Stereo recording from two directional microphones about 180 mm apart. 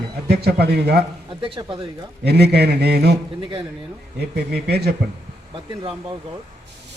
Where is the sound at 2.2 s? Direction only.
65° right (ahead or behind).